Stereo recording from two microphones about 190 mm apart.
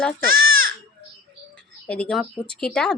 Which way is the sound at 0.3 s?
50° right (ahead or behind).